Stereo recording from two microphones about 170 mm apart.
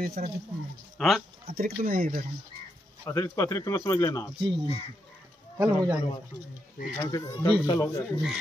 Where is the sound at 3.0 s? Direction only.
15° left (ahead or behind).